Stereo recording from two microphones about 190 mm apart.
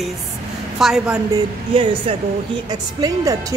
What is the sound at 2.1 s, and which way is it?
Speech, 30° right (ahead or behind).